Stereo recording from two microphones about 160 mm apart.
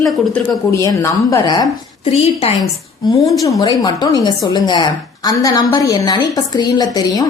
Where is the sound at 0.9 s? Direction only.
20° left (ahead or behind).